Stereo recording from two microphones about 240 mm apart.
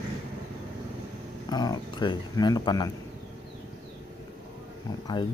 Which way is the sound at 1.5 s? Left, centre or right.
Centre.